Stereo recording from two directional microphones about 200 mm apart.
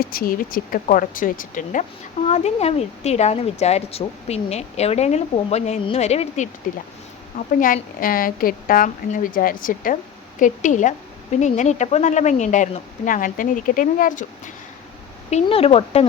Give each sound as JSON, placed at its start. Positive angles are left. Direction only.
{"t": 0.0, "sound": "a woman's voice", "side_deg": 45}
{"t": 7.6, "sound": "a woman's voice", "side_deg": 45}
{"t": 15.3, "sound": "speech", "side_deg": 30}